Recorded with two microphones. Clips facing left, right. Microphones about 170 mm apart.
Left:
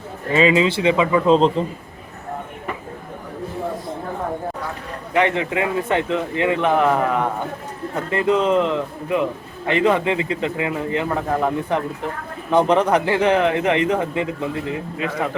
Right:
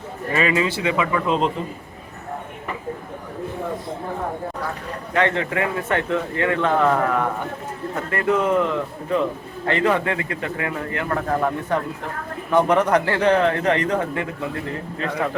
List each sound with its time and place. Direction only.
0.3 s a man's voice: 20° left (ahead or behind)
5.1 s a man's voice: 15° left (ahead or behind)
12.9 s speech: 15° left (ahead or behind)